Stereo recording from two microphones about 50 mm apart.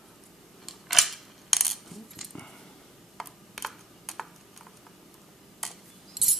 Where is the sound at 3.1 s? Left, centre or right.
Centre.